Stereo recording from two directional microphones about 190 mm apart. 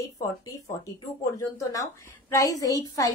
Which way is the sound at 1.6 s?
20° left (ahead or behind).